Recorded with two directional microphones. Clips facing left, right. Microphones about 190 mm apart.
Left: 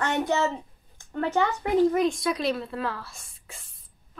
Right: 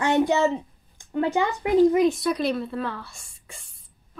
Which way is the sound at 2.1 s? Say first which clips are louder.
Right 2 dB; centre (ahead or behind).